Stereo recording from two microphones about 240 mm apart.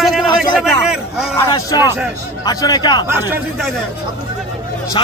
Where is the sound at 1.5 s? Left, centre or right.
Centre.